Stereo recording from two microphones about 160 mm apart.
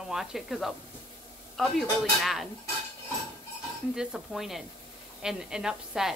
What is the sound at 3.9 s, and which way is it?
A woman's voice, centre (ahead or behind).